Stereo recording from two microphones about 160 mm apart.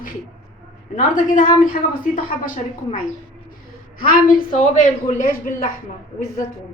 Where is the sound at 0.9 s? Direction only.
55° left (ahead or behind).